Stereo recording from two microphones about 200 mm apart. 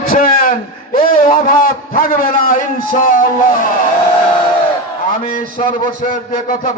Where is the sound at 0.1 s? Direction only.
45° left (ahead or behind).